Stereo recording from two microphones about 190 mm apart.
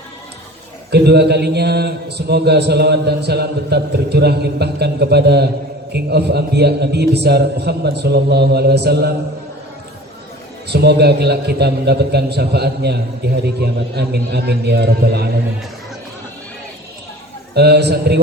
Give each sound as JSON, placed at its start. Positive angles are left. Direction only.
{"t": 0.9, "sound": "a man's voice", "side_deg": -60}
{"t": 10.7, "sound": "a man's voice", "side_deg": -60}
{"t": 17.5, "sound": "a man's voice", "side_deg": -60}